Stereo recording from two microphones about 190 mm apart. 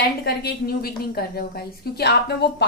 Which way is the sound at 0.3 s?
55° left (ahead or behind).